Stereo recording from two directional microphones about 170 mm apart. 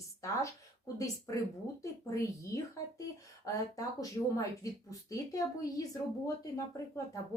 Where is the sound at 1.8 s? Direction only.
20° left (ahead or behind).